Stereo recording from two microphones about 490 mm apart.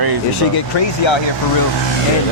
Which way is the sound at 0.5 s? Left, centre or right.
Left.